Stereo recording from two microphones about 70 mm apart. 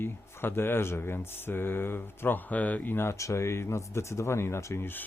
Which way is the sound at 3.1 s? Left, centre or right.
Left.